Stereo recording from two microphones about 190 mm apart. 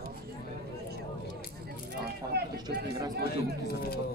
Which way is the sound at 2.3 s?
60° right (ahead or behind).